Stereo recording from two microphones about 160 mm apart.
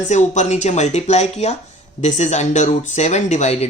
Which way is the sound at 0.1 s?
45° left (ahead or behind).